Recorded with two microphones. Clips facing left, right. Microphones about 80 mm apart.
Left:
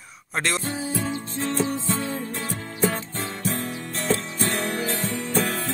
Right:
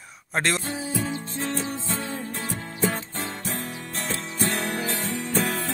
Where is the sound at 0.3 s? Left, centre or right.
Right.